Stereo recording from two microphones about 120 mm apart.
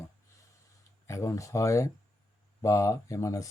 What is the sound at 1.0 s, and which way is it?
Speech, 25° left (ahead or behind).